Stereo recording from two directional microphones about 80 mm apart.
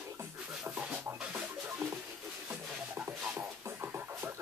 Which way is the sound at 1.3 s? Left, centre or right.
Right.